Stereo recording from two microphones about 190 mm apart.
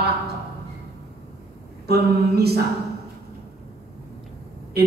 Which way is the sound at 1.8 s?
55° right (ahead or behind).